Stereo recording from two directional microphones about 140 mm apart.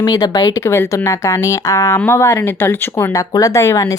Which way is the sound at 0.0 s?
25° left (ahead or behind).